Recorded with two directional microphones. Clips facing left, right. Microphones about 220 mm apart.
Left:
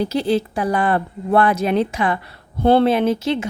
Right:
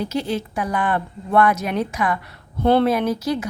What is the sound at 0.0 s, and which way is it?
A woman's voice, 35° left (ahead or behind).